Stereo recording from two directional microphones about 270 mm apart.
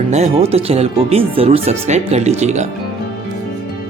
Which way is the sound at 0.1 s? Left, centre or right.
Right.